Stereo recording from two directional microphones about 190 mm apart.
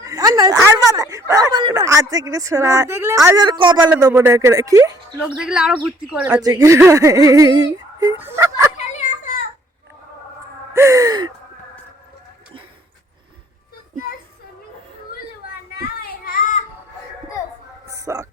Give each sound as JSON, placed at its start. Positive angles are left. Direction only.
{"t": 0.0, "sound": "speech", "side_deg": -20}
{"t": 3.8, "sound": "speech", "side_deg": -10}
{"t": 5.4, "sound": "speech", "side_deg": -5}
{"t": 6.4, "sound": "speech", "side_deg": -20}
{"t": 8.8, "sound": "children playing", "side_deg": 40}
{"t": 10.8, "sound": "speech", "side_deg": -15}
{"t": 15.7, "sound": "child singing", "side_deg": 50}
{"t": 17.8, "sound": "a sound", "side_deg": -15}